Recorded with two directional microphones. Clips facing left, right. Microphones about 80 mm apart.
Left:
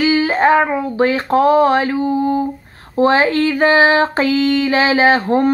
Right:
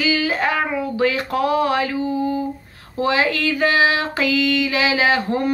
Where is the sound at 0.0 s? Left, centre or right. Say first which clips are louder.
Left 6 dB; left.